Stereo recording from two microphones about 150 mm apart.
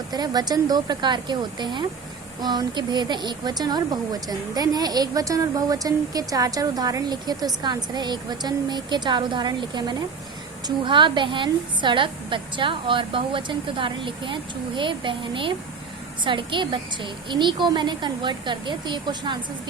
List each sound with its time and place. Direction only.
0.1 s a woman's voice: 25° right (ahead or behind)